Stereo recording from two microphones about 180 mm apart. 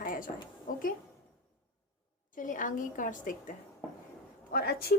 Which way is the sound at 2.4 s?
45° left (ahead or behind).